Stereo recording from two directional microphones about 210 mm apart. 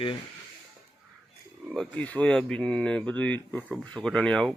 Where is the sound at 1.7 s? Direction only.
5° left (ahead or behind).